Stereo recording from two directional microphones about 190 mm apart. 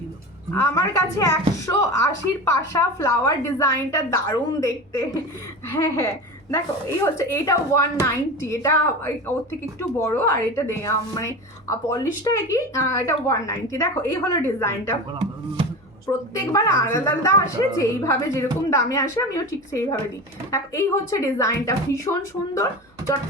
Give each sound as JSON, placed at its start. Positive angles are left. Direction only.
{"t": 0.5, "sound": "speech", "side_deg": 15}
{"t": 16.5, "sound": "speech", "side_deg": 15}